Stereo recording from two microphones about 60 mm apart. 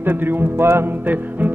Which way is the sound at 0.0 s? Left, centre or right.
Right.